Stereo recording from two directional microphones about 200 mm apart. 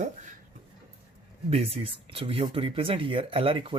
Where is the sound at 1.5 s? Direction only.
30° right (ahead or behind).